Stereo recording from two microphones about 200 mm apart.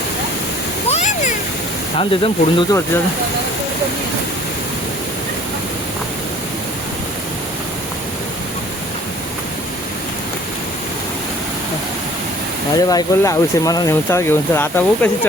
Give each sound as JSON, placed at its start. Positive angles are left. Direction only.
{"t": 0.9, "sound": "waterfall", "side_deg": 35}
{"t": 2.0, "sound": "speech", "side_deg": 25}
{"t": 12.7, "sound": "speech", "side_deg": 20}